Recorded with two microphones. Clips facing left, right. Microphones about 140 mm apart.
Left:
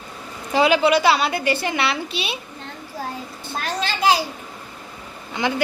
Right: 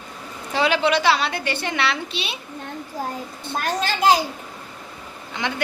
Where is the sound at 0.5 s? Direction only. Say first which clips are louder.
Left 3 dB; 10° left (ahead or behind).